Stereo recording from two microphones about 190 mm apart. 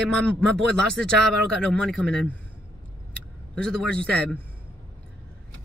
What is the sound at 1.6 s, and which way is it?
Speech, 5° left (ahead or behind).